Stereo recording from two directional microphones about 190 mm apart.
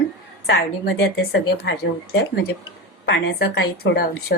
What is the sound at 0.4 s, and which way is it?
A woman's voice, 60° left (ahead or behind).